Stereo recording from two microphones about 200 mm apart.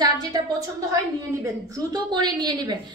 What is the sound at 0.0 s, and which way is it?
A woman's voice, 20° right (ahead or behind).